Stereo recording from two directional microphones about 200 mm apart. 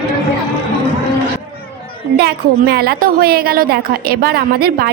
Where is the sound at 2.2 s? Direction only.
55° right (ahead or behind).